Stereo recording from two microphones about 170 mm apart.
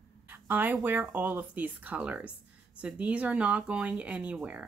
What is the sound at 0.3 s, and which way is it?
Speech, 10° right (ahead or behind).